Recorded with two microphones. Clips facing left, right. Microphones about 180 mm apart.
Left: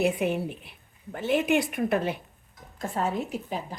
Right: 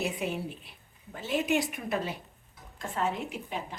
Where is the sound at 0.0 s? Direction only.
60° left (ahead or behind).